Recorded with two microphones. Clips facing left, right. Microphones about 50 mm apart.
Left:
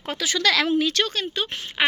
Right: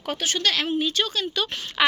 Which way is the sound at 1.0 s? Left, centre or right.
Left.